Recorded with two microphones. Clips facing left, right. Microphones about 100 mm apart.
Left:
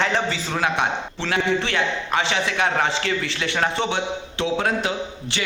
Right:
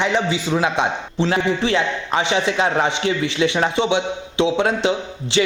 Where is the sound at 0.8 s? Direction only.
30° right (ahead or behind).